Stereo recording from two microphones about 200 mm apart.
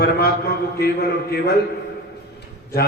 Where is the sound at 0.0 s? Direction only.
50° left (ahead or behind).